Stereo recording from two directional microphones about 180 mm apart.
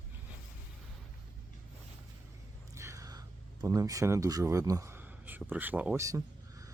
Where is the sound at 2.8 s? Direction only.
15° right (ahead or behind).